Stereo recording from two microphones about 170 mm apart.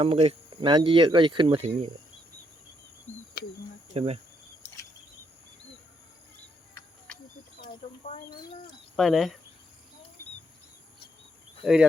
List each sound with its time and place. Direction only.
0.0 s speech: 35° right (ahead or behind)
3.4 s speech: 70° left (ahead or behind)
3.9 s cricket: 35° right (ahead or behind)
8.3 s speech: 25° left (ahead or behind)
9.0 s speech: centre (ahead or behind)
11.6 s speech: 5° right (ahead or behind)